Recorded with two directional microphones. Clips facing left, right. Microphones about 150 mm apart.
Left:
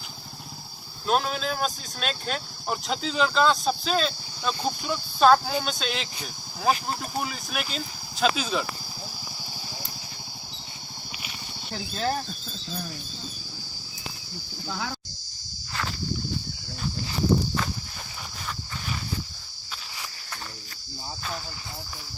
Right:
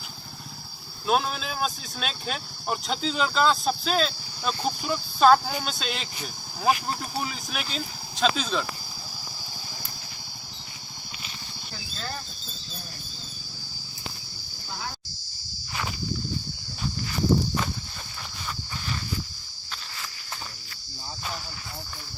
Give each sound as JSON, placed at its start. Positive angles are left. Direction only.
{"t": 1.0, "sound": "speech", "side_deg": -5}
{"t": 11.7, "sound": "speech", "side_deg": 60}
{"t": 14.7, "sound": "speech", "side_deg": 90}
{"t": 15.7, "sound": "walk", "side_deg": -15}